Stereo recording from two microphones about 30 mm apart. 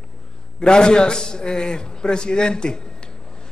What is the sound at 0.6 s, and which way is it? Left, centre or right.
A man's voice, left.